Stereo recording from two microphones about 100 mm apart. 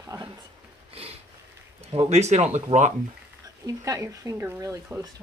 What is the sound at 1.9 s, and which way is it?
Speech, 90° right.